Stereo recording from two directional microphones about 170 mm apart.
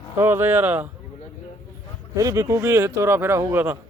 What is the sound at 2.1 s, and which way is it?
Speech, 20° right (ahead or behind).